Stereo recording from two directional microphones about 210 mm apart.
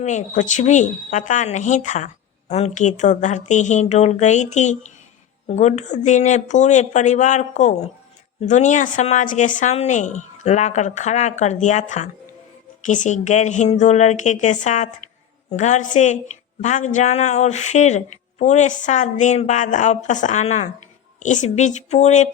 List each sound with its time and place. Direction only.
0.0 s a woman's voice: 35° left (ahead or behind)